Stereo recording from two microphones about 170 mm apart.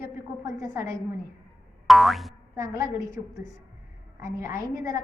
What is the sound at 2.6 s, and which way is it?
Speech, 20° right (ahead or behind).